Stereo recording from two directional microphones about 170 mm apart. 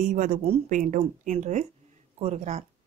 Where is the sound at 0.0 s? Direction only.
50° right (ahead or behind).